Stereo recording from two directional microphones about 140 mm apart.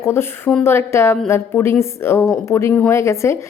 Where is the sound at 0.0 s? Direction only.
15° left (ahead or behind).